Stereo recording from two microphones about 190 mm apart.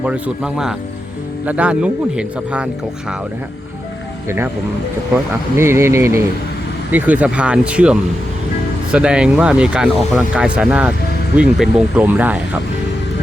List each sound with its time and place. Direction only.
0.0 s speech: 5° right (ahead or behind)
5.5 s speech: 15° right (ahead or behind)